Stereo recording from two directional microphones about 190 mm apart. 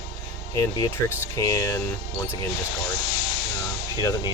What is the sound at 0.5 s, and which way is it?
Speech, 15° left (ahead or behind).